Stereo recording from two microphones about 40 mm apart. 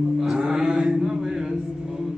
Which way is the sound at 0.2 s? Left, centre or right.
Centre.